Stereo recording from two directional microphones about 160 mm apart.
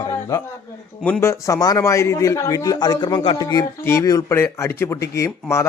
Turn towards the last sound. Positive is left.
turn(degrees=15)  # may be behind; listen again after turning